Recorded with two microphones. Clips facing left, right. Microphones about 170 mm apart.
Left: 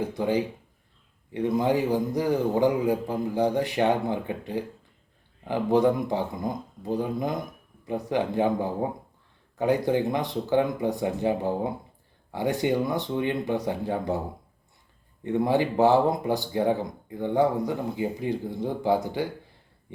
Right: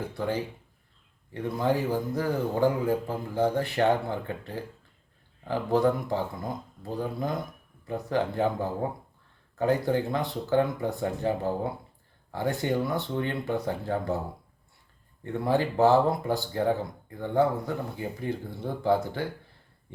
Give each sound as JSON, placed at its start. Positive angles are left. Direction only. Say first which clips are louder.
{"t": 0.1, "sound": "speech", "louder": "left 5 dB", "side_deg": 15}
{"t": 15.2, "sound": "speech", "louder": "left 3 dB", "side_deg": 15}